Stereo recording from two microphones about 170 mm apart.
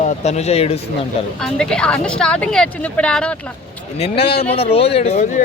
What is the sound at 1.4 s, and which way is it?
A woman's voice, 5° left (ahead or behind).